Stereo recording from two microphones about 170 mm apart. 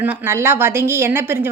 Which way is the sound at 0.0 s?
10° right (ahead or behind).